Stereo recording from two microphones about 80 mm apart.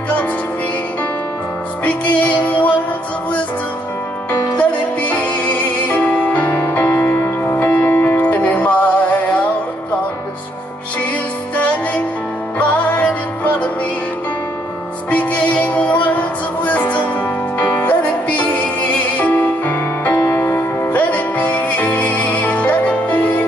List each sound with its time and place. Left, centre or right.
2.1 s music: centre
4.3 s music: centre
12.5 s music: centre
15.0 s music: centre
20.2 s music: left
20.9 s music: centre